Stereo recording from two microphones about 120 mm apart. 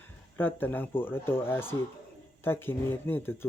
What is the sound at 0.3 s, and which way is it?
Speech, 15° left (ahead or behind).